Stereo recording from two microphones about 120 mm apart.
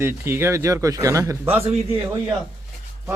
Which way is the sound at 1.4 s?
15° right (ahead or behind).